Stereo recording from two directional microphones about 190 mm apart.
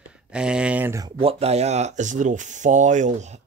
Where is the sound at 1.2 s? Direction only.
30° right (ahead or behind).